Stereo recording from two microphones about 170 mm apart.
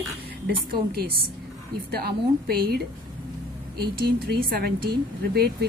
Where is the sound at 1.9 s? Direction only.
65° right (ahead or behind).